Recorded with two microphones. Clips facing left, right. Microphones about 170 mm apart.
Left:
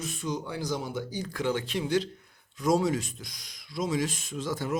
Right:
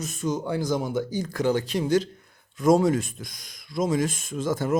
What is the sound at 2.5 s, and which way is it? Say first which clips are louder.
Speech: right 6 dB; 50° right (ahead or behind).